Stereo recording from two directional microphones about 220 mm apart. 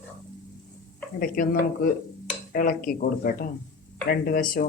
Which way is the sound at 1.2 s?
40° left (ahead or behind).